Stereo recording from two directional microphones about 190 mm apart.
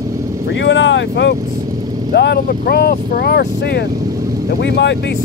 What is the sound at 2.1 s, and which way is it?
Speech, 55° left (ahead or behind).